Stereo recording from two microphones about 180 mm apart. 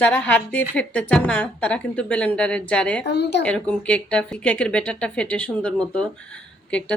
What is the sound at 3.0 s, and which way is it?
Speech, 65° left (ahead or behind).